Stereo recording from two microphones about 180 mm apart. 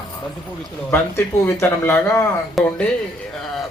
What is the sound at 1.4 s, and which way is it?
Speech, 15° left (ahead or behind).